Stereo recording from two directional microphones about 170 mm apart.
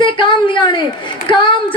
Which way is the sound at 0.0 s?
30° left (ahead or behind).